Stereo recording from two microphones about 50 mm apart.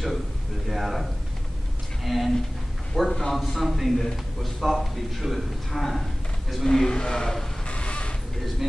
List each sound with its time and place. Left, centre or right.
0.7 s speech: centre
2.0 s a man's voice: centre
7.6 s a sound: left